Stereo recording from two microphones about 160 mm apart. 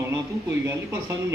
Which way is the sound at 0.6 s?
15° right (ahead or behind).